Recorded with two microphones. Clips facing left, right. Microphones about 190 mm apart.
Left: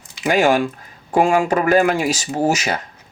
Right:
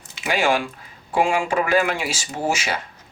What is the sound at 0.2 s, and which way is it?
Speech, 40° left (ahead or behind).